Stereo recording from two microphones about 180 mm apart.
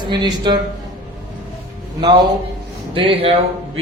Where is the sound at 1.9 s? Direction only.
25° right (ahead or behind).